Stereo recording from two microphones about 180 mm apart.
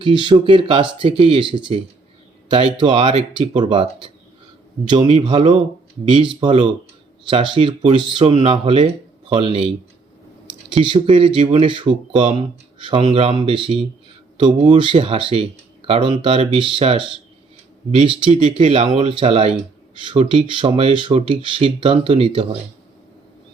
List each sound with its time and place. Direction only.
0.0 s speech: 25° right (ahead or behind)
10.8 s speech: 30° right (ahead or behind)
18.5 s speech: 35° right (ahead or behind)